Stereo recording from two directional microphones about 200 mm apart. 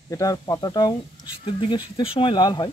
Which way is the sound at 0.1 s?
15° left (ahead or behind).